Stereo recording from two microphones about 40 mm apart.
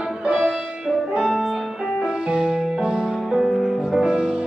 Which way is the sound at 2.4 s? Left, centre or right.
Centre.